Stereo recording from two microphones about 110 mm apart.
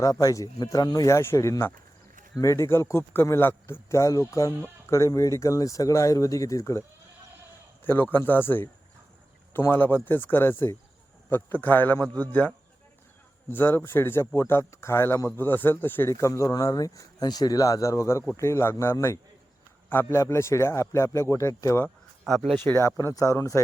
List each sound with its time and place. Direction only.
0.0 s speech: 30° left (ahead or behind)
8.1 s a man's voice: 20° left (ahead or behind)
21.8 s a sound: 5° left (ahead or behind)
22.5 s speech: 20° left (ahead or behind)